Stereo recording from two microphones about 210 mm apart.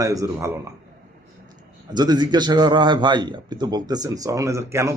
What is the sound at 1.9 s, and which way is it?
A man's voice, 20° right (ahead or behind).